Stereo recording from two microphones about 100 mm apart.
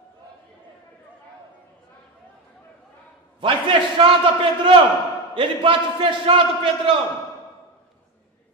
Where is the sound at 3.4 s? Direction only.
55° right (ahead or behind).